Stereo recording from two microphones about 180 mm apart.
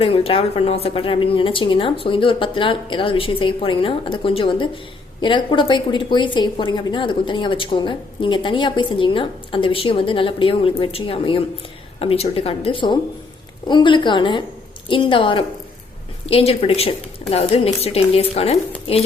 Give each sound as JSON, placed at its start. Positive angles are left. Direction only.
{"t": 0.0, "sound": "a woman's voice", "side_deg": 30}